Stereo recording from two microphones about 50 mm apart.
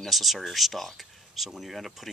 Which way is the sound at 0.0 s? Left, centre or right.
Centre.